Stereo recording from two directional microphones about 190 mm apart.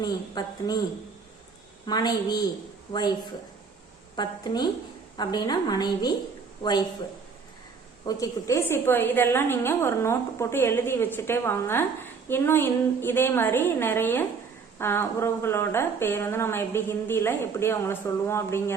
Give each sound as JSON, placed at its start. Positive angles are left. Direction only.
{"t": 0.0, "sound": "a woman's voice", "side_deg": 20}
{"t": 1.9, "sound": "a woman's voice", "side_deg": 20}
{"t": 4.1, "sound": "a woman's voice", "side_deg": 20}
{"t": 8.0, "sound": "speech", "side_deg": 15}